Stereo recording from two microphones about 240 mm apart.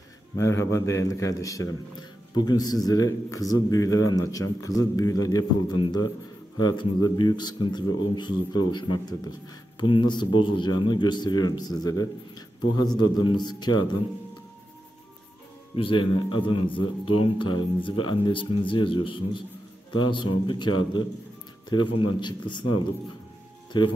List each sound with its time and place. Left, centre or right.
0.4 s a man's voice: centre
15.7 s a man's voice: left